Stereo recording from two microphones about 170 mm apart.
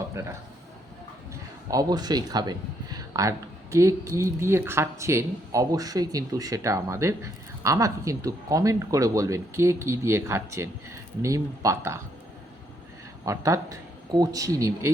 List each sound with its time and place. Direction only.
0.1 s a man's voice: 15° right (ahead or behind)
1.7 s speech: 20° right (ahead or behind)
13.2 s speech: 20° right (ahead or behind)